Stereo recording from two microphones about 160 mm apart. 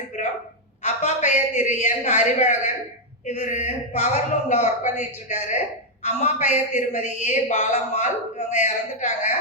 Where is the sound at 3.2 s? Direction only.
50° left (ahead or behind).